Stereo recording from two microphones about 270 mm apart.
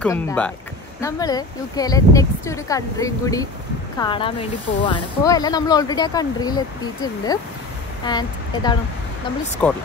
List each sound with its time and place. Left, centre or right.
0.0 s speech: centre
9.6 s speech: centre